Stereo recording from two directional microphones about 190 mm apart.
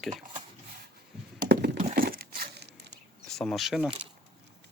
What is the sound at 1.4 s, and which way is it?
Wood, 60° right (ahead or behind).